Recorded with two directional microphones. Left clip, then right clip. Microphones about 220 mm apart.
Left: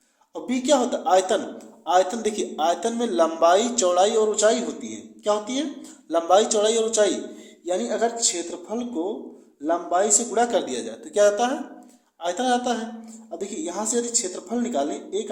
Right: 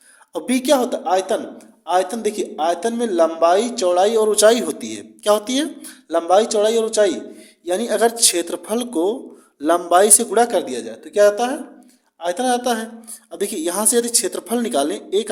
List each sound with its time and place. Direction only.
0.3 s a man's voice: 35° right (ahead or behind)
6.1 s a man's voice: 25° right (ahead or behind); by 15.3 s 40° right (ahead or behind)